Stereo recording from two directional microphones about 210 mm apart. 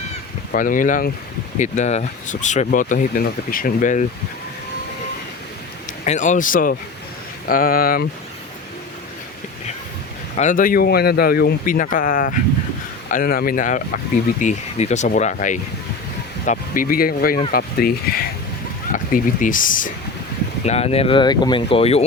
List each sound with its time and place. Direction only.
0.5 s speech: 40° left (ahead or behind)
6.1 s speech: 35° left (ahead or behind)
10.3 s speech: 35° left (ahead or behind)
20.7 s speech: 30° left (ahead or behind)